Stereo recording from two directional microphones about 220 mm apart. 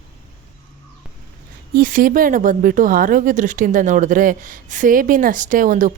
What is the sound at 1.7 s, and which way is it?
Speech, 40° right (ahead or behind).